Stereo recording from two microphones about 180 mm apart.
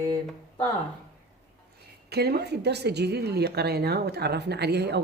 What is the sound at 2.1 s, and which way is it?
A woman's voice, 65° right (ahead or behind).